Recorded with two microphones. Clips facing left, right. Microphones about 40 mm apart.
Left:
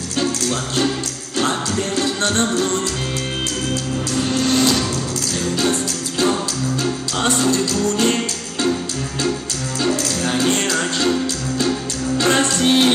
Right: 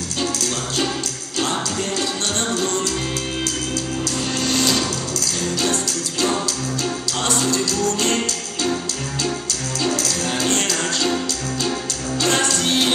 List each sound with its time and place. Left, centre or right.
2.0 s music: left
4.5 s vehicle: left
5.6 s music: left
9.8 s music: left
12.2 s music: left